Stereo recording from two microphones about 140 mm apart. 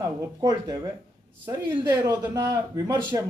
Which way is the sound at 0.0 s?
25° right (ahead or behind).